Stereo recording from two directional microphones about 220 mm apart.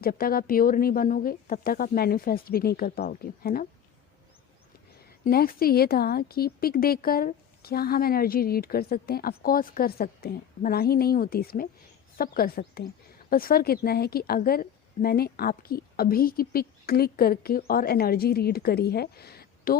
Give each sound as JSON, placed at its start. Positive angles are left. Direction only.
{"t": 0.0, "sound": "speech", "side_deg": 40}
{"t": 4.9, "sound": "a woman's voice", "side_deg": 45}